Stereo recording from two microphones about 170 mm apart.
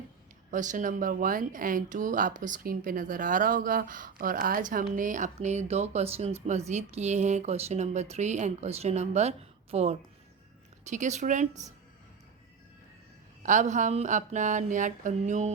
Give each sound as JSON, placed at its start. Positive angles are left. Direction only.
{"t": 0.5, "sound": "speech", "side_deg": -50}
{"t": 13.4, "sound": "speech", "side_deg": -50}